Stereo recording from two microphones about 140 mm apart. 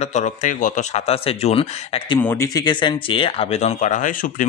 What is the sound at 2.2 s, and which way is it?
Speech, 20° left (ahead or behind).